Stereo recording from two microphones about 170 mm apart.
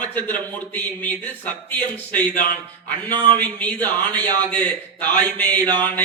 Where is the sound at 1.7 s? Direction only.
10° left (ahead or behind).